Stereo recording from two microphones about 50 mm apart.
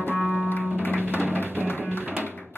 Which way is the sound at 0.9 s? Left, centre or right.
Right.